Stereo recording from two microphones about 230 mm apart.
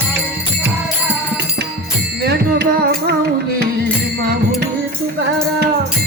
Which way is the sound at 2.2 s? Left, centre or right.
Right.